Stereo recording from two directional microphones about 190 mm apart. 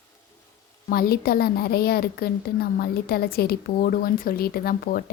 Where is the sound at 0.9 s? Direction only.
55° left (ahead or behind).